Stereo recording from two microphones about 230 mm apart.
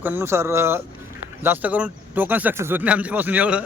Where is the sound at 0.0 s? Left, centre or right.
Centre.